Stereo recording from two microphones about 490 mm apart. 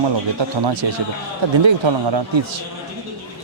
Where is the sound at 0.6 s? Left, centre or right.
Right.